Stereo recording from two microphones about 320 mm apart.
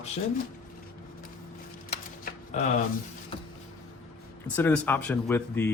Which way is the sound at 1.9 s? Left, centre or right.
Left.